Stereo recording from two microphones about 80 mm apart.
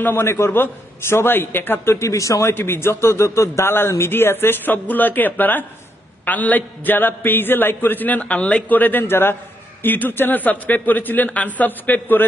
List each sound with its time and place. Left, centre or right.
0.0 s a man's voice: left
2.5 s a man's voice: left